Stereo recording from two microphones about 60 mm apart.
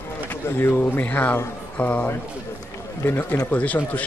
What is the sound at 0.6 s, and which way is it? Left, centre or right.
Speech, left.